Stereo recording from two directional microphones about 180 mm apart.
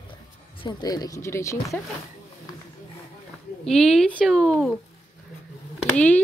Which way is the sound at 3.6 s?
Centre (ahead or behind).